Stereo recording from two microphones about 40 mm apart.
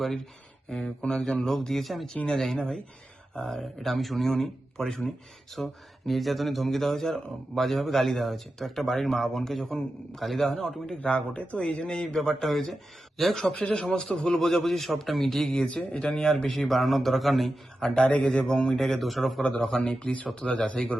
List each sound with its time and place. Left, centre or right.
0.0 s speech: centre
0.7 s a man's voice: centre
11.0 s a man's voice: left; by 15.5 s centre
15.5 s a man's voice: left
16.5 s speech: centre
17.9 s speech: left
18.7 s speech: centre
19.7 s speech: centre